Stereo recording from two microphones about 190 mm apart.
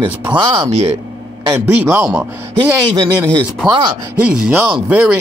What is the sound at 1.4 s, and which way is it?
Speech, 15° right (ahead or behind).